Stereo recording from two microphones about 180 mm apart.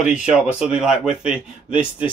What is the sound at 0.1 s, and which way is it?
Speech, 5° right (ahead or behind).